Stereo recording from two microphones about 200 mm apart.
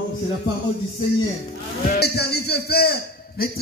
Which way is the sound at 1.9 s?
55° left (ahead or behind).